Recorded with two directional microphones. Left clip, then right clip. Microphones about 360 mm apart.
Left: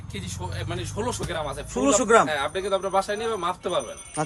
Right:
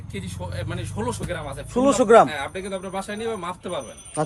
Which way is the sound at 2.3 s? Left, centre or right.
Centre.